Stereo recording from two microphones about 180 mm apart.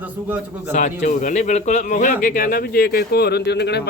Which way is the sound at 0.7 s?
45° left (ahead or behind).